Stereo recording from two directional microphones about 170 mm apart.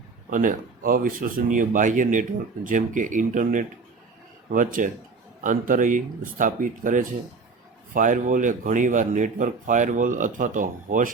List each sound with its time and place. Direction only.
0.3 s speech: 50° right (ahead or behind)